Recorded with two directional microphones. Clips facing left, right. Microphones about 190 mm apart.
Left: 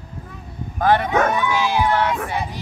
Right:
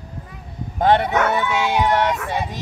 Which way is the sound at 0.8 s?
20° right (ahead or behind).